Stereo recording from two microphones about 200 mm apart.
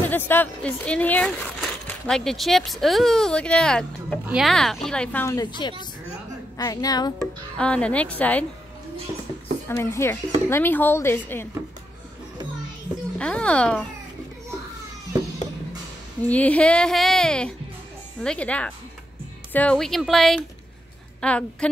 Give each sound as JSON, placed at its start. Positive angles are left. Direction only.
{"t": 0.0, "sound": "speech", "side_deg": 10}
{"t": 7.5, "sound": "speech", "side_deg": 5}
{"t": 9.7, "sound": "speech", "side_deg": 15}
{"t": 13.2, "sound": "speech", "side_deg": 5}
{"t": 16.3, "sound": "speech", "side_deg": 5}